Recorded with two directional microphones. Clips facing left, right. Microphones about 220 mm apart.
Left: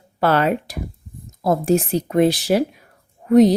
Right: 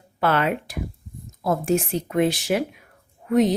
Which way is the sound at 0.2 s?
40° left (ahead or behind).